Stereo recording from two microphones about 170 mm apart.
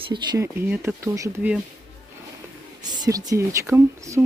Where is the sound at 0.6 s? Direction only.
10° right (ahead or behind).